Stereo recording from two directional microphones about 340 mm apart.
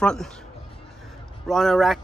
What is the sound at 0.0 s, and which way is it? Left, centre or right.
Speech, centre.